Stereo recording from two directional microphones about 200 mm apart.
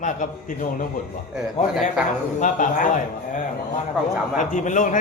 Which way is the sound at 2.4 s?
40° left (ahead or behind).